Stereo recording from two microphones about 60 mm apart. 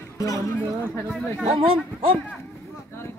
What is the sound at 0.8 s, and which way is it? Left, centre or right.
Speech, left.